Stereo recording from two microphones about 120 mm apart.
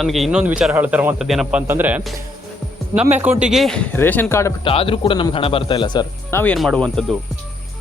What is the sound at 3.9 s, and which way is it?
Speech, 15° left (ahead or behind).